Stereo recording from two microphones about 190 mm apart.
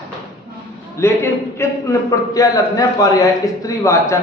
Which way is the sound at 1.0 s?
15° left (ahead or behind).